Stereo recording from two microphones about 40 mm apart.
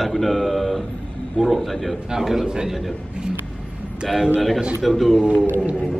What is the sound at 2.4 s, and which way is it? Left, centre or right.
Speech, centre.